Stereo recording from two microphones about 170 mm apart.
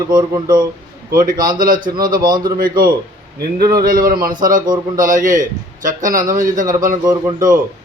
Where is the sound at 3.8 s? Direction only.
55° right (ahead or behind).